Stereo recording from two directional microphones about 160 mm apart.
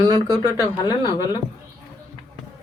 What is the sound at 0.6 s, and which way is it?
Speech, 25° left (ahead or behind).